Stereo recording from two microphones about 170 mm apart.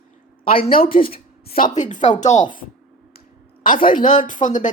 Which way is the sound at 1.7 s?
45° left (ahead or behind).